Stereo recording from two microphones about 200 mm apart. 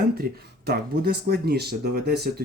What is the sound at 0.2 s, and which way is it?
Speech, 50° right (ahead or behind).